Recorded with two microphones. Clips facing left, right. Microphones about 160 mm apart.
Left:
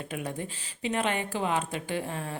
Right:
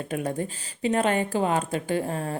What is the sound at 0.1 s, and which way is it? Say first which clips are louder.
Speech: right 8 dB; 45° right (ahead or behind).